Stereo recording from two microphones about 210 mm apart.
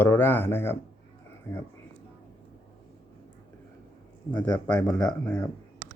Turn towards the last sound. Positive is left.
turn(degrees=5)  # may be behind; listen again after turning